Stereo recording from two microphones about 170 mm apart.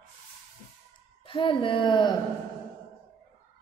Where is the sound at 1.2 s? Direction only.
30° left (ahead or behind).